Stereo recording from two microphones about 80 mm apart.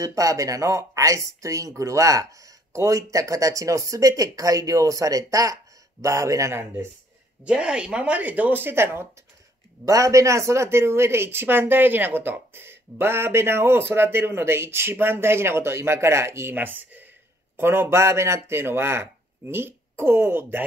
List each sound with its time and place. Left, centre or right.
0.0 s speech: right
6.6 s speech: right
7.4 s speech: centre; by 9.0 s right
9.8 s speech: right